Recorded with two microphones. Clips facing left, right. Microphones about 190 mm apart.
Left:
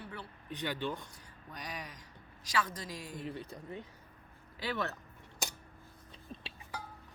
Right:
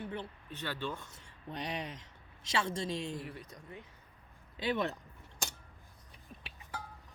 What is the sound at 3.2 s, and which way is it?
Speech, 25° left (ahead or behind).